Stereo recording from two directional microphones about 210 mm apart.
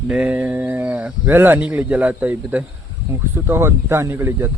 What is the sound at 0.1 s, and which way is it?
Speech, 5° right (ahead or behind).